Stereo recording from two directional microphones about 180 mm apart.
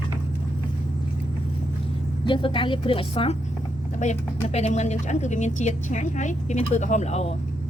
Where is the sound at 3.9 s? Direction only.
40° left (ahead or behind).